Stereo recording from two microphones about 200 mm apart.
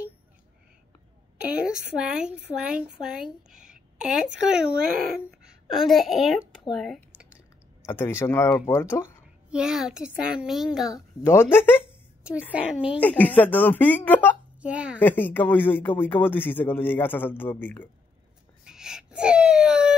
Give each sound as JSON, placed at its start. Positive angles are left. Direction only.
{"t": 1.5, "sound": "a child's voice", "side_deg": -5}
{"t": 6.7, "sound": "computer keyboard", "side_deg": 0}
{"t": 7.8, "sound": "speech", "side_deg": 10}
{"t": 9.5, "sound": "a child's voice", "side_deg": -5}
{"t": 10.9, "sound": "speech", "side_deg": 15}
{"t": 12.2, "sound": "a sound", "side_deg": -5}
{"t": 12.5, "sound": "speech", "side_deg": -5}
{"t": 13.0, "sound": "speech", "side_deg": 10}
{"t": 14.6, "sound": "a child's voice", "side_deg": -5}
{"t": 15.0, "sound": "speech", "side_deg": 10}
{"t": 18.7, "sound": "a sound", "side_deg": -5}